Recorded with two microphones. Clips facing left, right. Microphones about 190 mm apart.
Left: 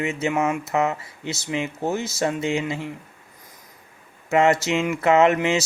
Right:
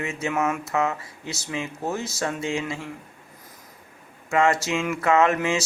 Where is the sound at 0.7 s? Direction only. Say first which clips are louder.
Left 2 dB; 20° left (ahead or behind).